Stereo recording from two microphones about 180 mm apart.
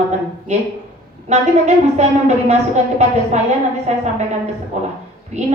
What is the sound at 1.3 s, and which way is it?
Speech, 40° right (ahead or behind).